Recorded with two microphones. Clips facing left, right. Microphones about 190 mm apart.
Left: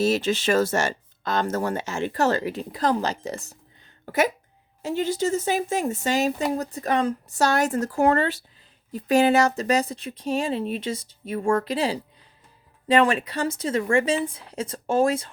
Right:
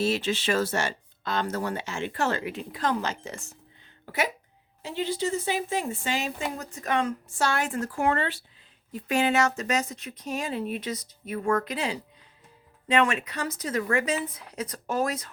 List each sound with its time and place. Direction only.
0.0 s speech: 40° left (ahead or behind)